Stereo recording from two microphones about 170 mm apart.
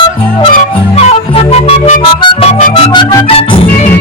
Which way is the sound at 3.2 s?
35° left (ahead or behind).